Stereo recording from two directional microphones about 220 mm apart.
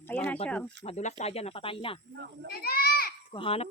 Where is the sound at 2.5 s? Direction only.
45° left (ahead or behind).